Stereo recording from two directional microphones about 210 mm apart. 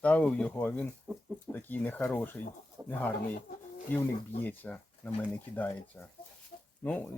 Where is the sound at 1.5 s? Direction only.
10° left (ahead or behind).